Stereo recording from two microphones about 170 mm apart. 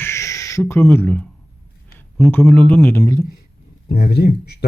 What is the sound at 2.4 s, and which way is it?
Speech, 10° left (ahead or behind).